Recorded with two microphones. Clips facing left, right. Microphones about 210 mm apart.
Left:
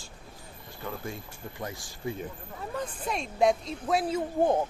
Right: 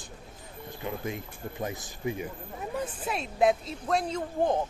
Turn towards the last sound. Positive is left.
turn(degrees=5)  # may be behind; listen again after turning